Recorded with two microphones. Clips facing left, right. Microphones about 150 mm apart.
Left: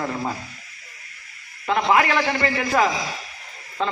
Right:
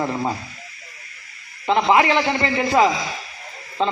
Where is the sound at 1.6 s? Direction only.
25° right (ahead or behind).